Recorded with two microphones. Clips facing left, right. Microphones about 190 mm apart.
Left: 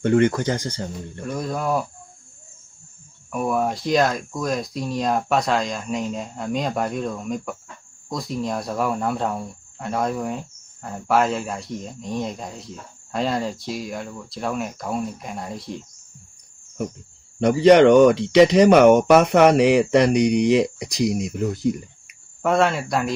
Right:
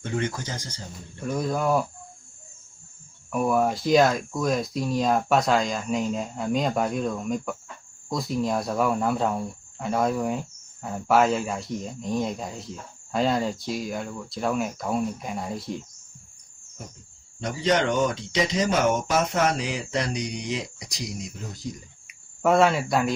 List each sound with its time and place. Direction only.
0.0 s speech: 60° left (ahead or behind)
1.2 s speech: centre (ahead or behind)
3.3 s speech: centre (ahead or behind)
17.4 s speech: 65° left (ahead or behind)
22.0 s cricket: centre (ahead or behind)